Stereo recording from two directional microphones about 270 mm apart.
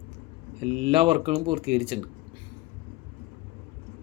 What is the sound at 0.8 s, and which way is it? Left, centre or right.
Speech, centre.